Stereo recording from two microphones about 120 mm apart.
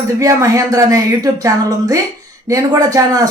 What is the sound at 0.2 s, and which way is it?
Speech, 25° right (ahead or behind).